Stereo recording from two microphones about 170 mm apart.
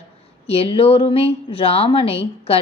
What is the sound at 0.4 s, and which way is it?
A woman's voice, 35° left (ahead or behind).